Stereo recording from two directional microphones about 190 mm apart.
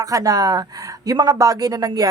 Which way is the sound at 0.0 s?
20° right (ahead or behind).